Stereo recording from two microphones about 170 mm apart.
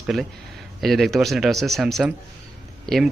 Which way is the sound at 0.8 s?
Centre (ahead or behind).